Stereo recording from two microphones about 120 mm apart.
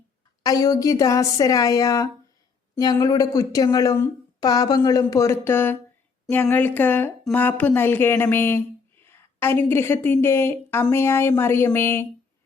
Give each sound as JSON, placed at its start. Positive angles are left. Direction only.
{"t": 0.4, "sound": "a woman's voice", "side_deg": 30}